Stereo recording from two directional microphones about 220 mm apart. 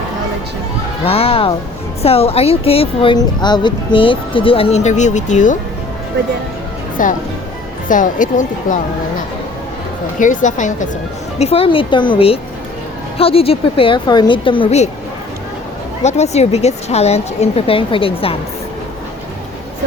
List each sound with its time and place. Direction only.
1.0 s speech: 25° left (ahead or behind)
7.0 s speech: 35° left (ahead or behind)
10.2 s speech: 35° left (ahead or behind)
16.0 s speech: 30° left (ahead or behind)